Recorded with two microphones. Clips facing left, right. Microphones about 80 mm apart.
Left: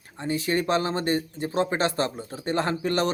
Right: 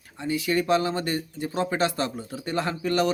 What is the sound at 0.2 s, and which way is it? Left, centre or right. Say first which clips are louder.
Speech: even; left.